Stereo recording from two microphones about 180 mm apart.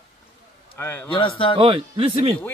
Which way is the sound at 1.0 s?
30° left (ahead or behind).